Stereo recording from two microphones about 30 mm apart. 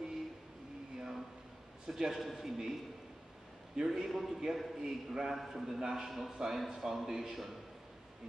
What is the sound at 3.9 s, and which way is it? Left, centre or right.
A man's voice, centre.